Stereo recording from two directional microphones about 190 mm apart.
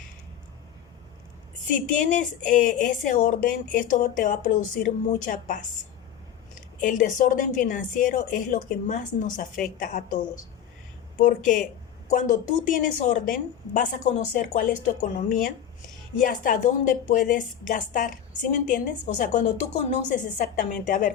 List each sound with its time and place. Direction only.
1.7 s a woman's voice: 40° left (ahead or behind)
11.2 s a woman's voice: 45° left (ahead or behind)